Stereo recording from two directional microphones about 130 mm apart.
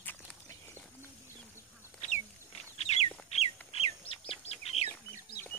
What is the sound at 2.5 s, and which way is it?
Bird, 50° left (ahead or behind).